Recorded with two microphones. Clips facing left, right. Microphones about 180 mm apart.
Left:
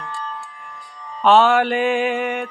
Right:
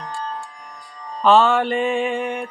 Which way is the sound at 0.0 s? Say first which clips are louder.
Right 1 dB; 40° right (ahead or behind).